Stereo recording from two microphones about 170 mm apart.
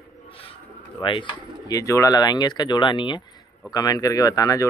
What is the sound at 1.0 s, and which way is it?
Speech, 30° left (ahead or behind).